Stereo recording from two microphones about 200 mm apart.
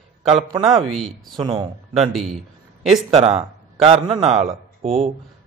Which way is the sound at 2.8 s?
Centre (ahead or behind).